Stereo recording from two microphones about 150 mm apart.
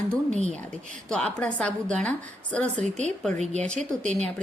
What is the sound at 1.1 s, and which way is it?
A woman's voice, 5° left (ahead or behind).